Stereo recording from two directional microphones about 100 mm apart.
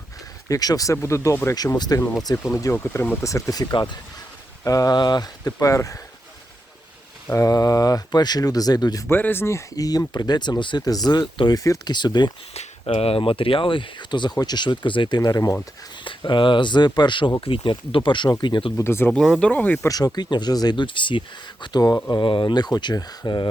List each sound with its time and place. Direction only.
0.4 s speech: 40° left (ahead or behind)
1.5 s speech: 40° left (ahead or behind)
5.5 s speech: 35° left (ahead or behind)
7.3 s speech: 30° left (ahead or behind)
9.0 s speech: 20° left (ahead or behind)
11.9 s speech: 45° left (ahead or behind)
12.5 s speech: 80° left; by 15.2 s 55° left (ahead or behind)
15.2 s speech: 35° left (ahead or behind)
16.0 s speech: 55° left (ahead or behind)
17.4 s speech: 65° left (ahead or behind)
18.8 s speech: 25° left (ahead or behind)
19.4 s speech: 15° left (ahead or behind)
20.1 s speech: 45° left (ahead or behind)
22.1 s speech: 55° left (ahead or behind)